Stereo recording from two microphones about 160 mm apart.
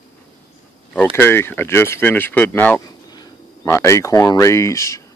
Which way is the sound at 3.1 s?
25° left (ahead or behind).